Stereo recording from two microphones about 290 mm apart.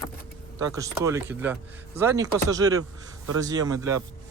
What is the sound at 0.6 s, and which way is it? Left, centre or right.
Speech, centre.